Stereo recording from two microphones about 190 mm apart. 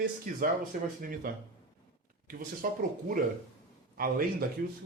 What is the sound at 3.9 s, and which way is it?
Speech, 50° right (ahead or behind).